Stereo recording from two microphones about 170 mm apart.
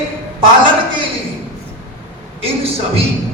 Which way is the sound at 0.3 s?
30° right (ahead or behind).